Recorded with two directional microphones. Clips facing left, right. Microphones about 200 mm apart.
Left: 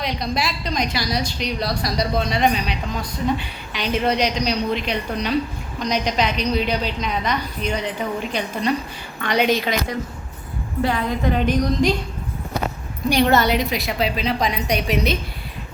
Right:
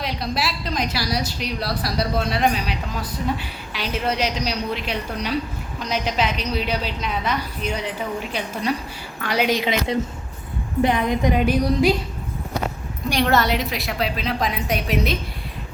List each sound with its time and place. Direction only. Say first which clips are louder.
0.0 s a woman's voice: left 1 dB; 5° right (ahead or behind)
9.6 s a woman's voice: right 2 dB; 20° right (ahead or behind)
13.1 s a woman's voice: left 3 dB; centre (ahead or behind)